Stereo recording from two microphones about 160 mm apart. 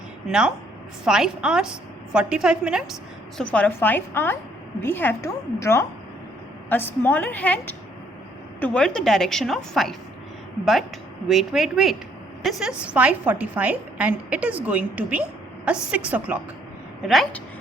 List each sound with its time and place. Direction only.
0.3 s a woman's voice: 5° right (ahead or behind)
3.3 s a woman's voice: 10° left (ahead or behind)
11.3 s a woman's voice: centre (ahead or behind)
17.1 s a woman's voice: centre (ahead or behind)